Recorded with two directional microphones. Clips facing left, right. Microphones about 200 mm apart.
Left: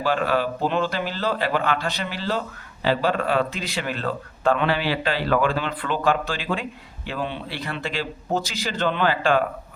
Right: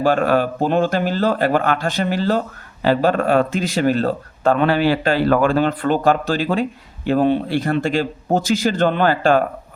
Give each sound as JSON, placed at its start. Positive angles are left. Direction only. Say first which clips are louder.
{"t": 0.0, "sound": "a man's voice", "louder": "right 6 dB", "side_deg": -50}